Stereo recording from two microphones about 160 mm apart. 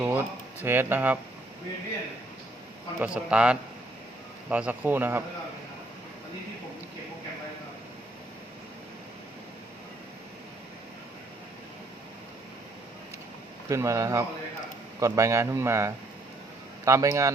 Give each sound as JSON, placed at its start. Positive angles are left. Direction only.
{"t": 0.0, "sound": "speech", "side_deg": -15}
{"t": 3.0, "sound": "speech", "side_deg": -5}
{"t": 13.7, "sound": "a man's voice", "side_deg": -20}